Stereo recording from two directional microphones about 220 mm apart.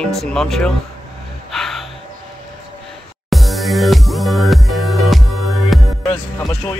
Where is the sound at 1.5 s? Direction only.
Centre (ahead or behind).